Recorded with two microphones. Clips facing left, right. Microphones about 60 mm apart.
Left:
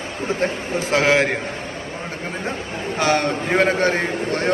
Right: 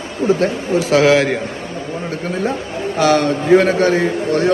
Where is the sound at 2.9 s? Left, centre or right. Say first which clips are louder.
Right 5 dB; left.